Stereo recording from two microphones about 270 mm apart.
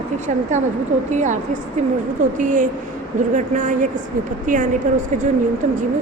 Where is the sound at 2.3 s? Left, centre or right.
Right.